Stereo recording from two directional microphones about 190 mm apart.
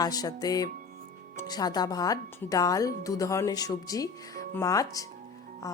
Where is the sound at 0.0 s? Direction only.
20° left (ahead or behind).